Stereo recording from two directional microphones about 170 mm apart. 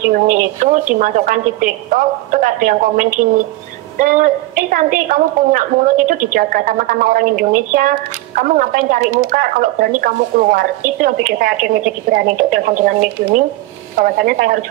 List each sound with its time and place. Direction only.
0.1 s speech: 50° right (ahead or behind)
13.9 s speech: 55° right (ahead or behind)